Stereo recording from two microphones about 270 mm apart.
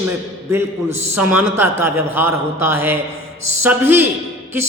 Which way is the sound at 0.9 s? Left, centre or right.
Right.